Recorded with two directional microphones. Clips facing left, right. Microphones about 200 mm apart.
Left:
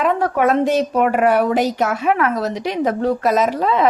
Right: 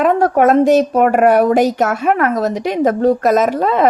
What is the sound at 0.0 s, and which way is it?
A woman's voice, 45° right (ahead or behind).